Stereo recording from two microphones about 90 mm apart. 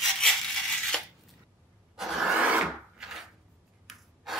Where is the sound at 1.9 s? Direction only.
5° right (ahead or behind).